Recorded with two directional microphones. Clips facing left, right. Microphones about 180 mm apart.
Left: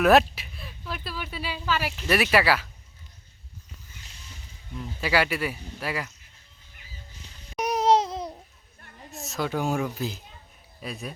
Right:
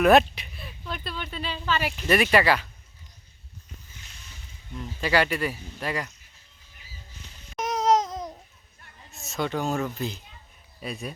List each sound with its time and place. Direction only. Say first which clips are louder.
0.0 s speech: right 1 dB; centre (ahead or behind)
4.7 s speech: right 1 dB; 5° left (ahead or behind)
7.5 s a sound: left 2 dB; centre (ahead or behind)
7.9 s babbling: left 1 dB; 30° left (ahead or behind)
9.1 s speech: even; centre (ahead or behind)